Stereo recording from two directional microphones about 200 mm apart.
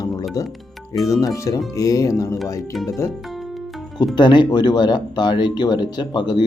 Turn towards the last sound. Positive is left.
turn(degrees=20)  # may be behind; listen again after turning